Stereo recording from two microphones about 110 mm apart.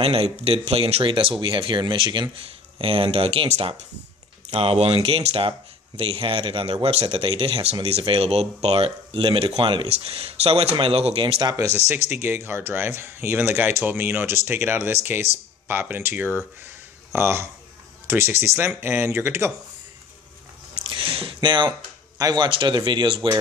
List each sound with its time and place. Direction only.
0.0 s speech: 60° right (ahead or behind); by 2.3 s 45° right (ahead or behind)
2.8 s speech: 55° right (ahead or behind); by 3.8 s 80° right
4.5 s speech: 65° right (ahead or behind)
7.1 s speech: 50° right (ahead or behind)
11.4 s speech: 30° right (ahead or behind)
11.9 s speech: 20° right (ahead or behind)
20.7 s a sound: 50° right (ahead or behind)
22.2 s speech: 40° right (ahead or behind)